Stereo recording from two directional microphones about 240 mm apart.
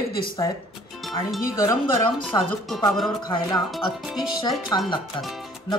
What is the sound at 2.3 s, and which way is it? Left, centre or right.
Speech, centre.